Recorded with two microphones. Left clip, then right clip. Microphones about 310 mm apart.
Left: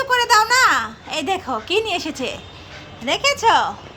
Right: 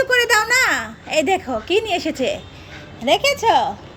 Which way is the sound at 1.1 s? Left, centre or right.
Left.